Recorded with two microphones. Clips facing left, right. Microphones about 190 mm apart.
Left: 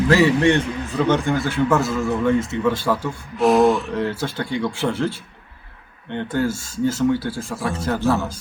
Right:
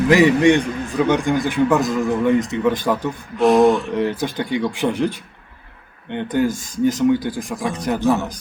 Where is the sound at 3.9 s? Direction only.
15° right (ahead or behind).